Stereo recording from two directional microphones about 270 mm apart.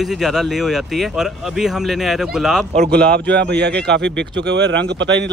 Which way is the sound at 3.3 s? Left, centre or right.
Right.